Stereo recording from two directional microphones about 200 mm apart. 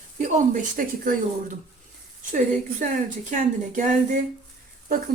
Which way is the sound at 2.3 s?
40° right (ahead or behind).